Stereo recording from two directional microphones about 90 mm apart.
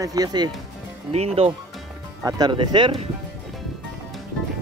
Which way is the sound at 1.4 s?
90° right.